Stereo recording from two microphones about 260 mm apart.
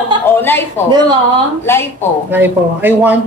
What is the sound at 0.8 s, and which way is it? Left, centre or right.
Speech, centre.